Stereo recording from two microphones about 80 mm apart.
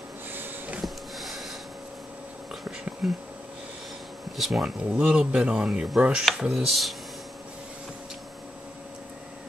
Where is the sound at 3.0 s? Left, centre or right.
Centre.